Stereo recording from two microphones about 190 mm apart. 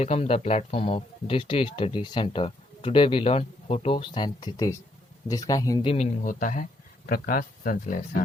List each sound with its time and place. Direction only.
0.0 s speech: 30° left (ahead or behind)
6.2 s speech: 45° left (ahead or behind)